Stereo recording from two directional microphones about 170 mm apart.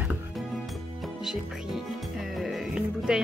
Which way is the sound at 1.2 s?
Centre (ahead or behind).